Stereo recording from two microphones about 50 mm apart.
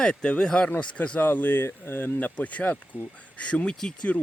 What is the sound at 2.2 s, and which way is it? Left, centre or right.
Speech, left.